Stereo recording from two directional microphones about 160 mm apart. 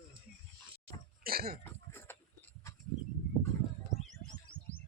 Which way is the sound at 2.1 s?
15° left (ahead or behind).